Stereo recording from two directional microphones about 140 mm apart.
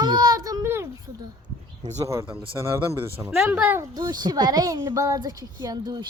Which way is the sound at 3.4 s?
10° right (ahead or behind).